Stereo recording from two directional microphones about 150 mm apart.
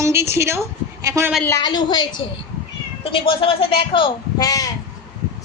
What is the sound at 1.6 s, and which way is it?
A woman's voice, 30° left (ahead or behind).